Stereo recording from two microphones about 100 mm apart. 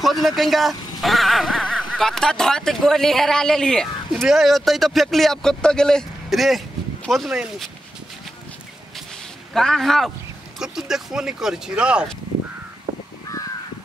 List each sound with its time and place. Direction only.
0.0 s speech: centre (ahead or behind)
9.5 s speech: 5° left (ahead or behind)
12.9 s crow: 45° right (ahead or behind)